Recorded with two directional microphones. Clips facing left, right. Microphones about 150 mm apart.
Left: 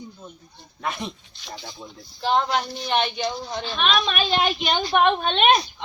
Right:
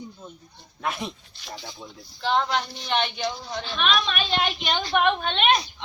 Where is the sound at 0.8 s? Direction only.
Centre (ahead or behind).